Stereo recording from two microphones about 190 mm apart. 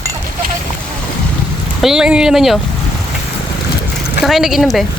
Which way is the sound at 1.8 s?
5° right (ahead or behind).